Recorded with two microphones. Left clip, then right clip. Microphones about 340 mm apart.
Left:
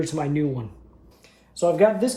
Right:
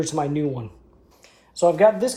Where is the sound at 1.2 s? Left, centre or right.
Centre.